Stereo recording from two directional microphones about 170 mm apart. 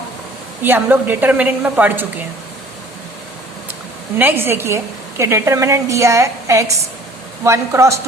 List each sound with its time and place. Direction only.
0.6 s a woman's voice: 10° right (ahead or behind)
4.2 s a woman's voice: 15° right (ahead or behind)